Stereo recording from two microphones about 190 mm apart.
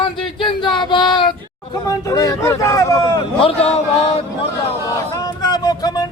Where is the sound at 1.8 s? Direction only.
20° left (ahead or behind).